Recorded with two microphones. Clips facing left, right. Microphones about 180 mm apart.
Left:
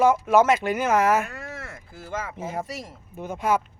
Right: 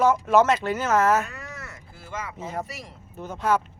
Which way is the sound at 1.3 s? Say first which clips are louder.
Left 3 dB; 50° left (ahead or behind).